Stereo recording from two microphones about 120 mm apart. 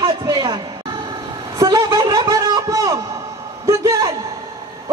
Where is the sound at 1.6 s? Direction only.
30° right (ahead or behind).